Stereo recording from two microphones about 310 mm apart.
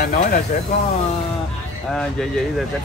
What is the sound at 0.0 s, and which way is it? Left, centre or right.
Speech, left.